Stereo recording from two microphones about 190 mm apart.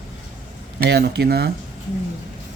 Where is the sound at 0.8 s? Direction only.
60° right (ahead or behind).